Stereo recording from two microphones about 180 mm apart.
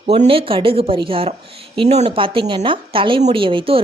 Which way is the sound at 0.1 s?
30° right (ahead or behind).